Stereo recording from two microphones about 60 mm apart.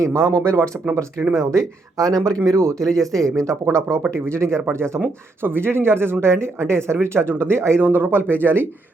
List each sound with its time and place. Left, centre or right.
0.0 s speech: right
2.7 s speech: centre
3.3 s speech: right